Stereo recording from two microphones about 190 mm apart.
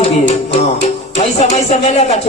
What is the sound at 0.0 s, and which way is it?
Music, 35° left (ahead or behind).